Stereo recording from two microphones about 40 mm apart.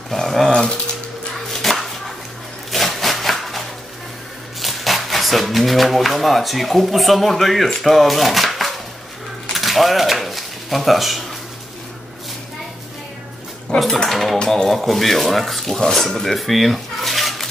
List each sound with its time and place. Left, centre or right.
0.1 s speech: centre
0.5 s speech: centre
1.5 s a sound: centre
4.6 s speech: centre
9.5 s a sound: centre
13.7 s cutlery: centre
14.1 s speech: centre
14.4 s speech: centre
14.7 s speech: centre
15.9 s a sound: centre